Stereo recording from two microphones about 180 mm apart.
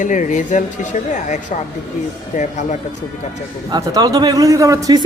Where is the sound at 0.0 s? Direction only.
45° left (ahead or behind).